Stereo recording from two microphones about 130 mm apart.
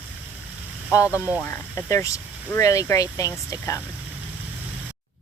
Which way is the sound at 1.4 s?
20° left (ahead or behind).